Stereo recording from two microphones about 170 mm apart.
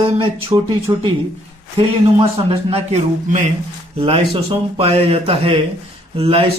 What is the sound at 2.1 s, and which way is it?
A man's voice, 35° right (ahead or behind).